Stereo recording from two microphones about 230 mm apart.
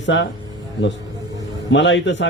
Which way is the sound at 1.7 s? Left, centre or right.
Left.